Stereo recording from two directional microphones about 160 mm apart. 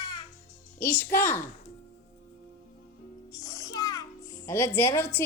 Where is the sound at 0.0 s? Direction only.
25° left (ahead or behind).